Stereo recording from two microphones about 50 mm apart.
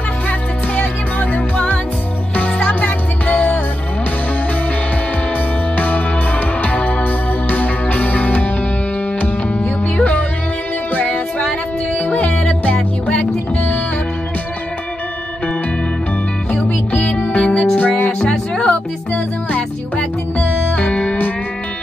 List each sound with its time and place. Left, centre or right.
0.3 s music: left
5.8 s music: left
16.6 s music: left
17.7 s music: left
18.2 s music: centre